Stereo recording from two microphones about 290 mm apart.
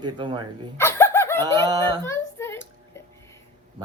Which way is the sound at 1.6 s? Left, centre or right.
Centre.